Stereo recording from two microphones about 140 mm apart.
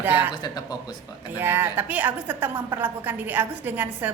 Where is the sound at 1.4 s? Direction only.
15° right (ahead or behind).